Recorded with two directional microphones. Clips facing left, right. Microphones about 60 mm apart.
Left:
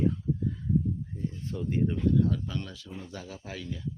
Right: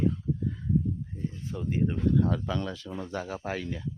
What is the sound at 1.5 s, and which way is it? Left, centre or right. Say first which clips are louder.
Speech: even; centre.